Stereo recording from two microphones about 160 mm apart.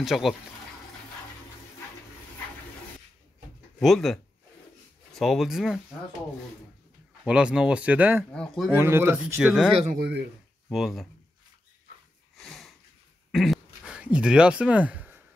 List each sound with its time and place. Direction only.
0.0 s speech: centre (ahead or behind)
3.8 s speech: centre (ahead or behind)
7.2 s speech: 5° right (ahead or behind)
8.3 s speech: centre (ahead or behind)
8.7 s speech: 15° right (ahead or behind)
9.9 s speech: 85° right
10.7 s speech: centre (ahead or behind)
12.4 s sniff: centre (ahead or behind)
13.3 s a sound: centre (ahead or behind)